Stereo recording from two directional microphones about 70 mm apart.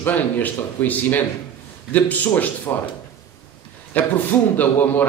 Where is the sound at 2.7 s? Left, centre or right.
Left.